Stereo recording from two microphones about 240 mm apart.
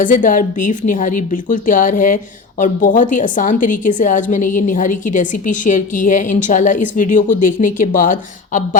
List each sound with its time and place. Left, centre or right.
0.0 s a woman's voice: left